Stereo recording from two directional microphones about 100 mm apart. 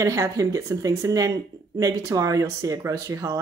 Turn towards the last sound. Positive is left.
turn(degrees=-30)  # may be behind; listen again after turning